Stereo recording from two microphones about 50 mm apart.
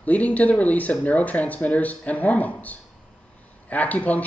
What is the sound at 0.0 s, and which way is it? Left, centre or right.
Speech, left.